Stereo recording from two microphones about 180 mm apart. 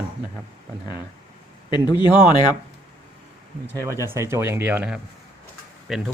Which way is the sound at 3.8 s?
15° right (ahead or behind).